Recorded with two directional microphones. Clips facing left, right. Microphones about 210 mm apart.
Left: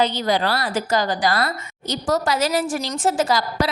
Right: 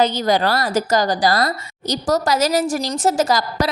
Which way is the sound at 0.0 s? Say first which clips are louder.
Right 3 dB; 45° right (ahead or behind).